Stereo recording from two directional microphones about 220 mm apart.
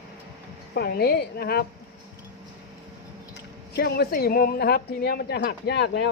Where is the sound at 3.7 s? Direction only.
45° left (ahead or behind).